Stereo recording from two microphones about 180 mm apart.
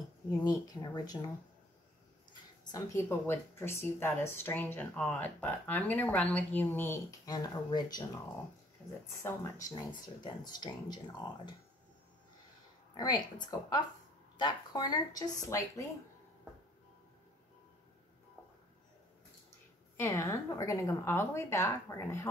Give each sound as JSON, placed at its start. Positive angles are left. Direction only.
{"t": 0.4, "sound": "speech", "side_deg": 20}
{"t": 2.6, "sound": "speech", "side_deg": 20}
{"t": 9.2, "sound": "speech", "side_deg": 20}
{"t": 12.9, "sound": "speech", "side_deg": 25}
{"t": 20.0, "sound": "speech", "side_deg": 15}